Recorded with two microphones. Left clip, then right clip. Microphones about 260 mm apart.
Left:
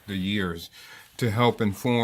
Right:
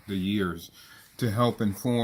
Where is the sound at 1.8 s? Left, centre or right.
Left.